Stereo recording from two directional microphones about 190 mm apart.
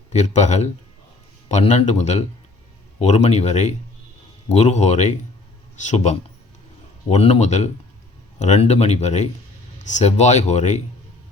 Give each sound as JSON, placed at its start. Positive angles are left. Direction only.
{"t": 0.1, "sound": "speech", "side_deg": 40}